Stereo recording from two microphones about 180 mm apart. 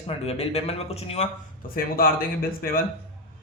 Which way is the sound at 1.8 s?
55° left (ahead or behind).